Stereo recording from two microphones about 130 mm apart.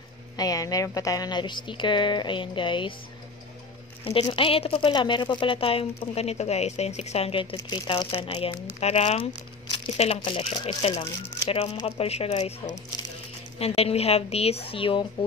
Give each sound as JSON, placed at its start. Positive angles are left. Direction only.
{"t": 0.4, "sound": "speech", "side_deg": 30}
{"t": 4.0, "sound": "speech", "side_deg": 45}
{"t": 7.7, "sound": "speech", "side_deg": 35}